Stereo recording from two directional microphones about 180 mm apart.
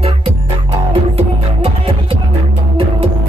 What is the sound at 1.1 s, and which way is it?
Music, 35° right (ahead or behind).